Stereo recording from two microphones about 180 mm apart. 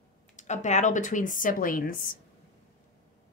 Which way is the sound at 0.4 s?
40° left (ahead or behind).